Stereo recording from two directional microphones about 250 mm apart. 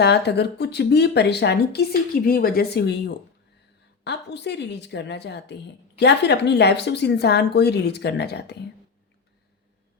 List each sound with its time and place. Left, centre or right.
0.0 s speech: left
4.0 s a woman's voice: left